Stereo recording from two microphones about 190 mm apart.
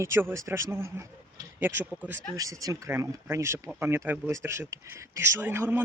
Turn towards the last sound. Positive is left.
turn(degrees=-10)  # may be behind; listen again after turning